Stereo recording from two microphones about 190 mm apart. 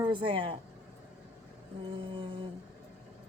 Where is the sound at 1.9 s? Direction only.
30° right (ahead or behind).